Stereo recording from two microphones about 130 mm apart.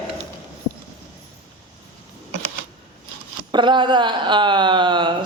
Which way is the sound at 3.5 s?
35° right (ahead or behind).